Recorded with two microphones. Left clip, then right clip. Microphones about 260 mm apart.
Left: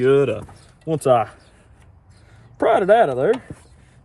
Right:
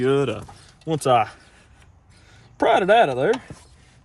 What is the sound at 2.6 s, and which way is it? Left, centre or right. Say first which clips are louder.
Speech: left 1 dB; right.